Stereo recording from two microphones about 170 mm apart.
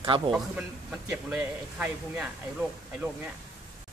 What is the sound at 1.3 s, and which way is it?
Speech, 5° right (ahead or behind).